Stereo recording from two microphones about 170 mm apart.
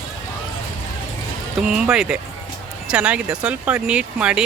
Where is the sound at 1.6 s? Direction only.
5° right (ahead or behind).